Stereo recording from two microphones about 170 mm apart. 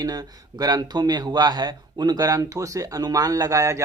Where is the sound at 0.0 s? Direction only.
20° right (ahead or behind).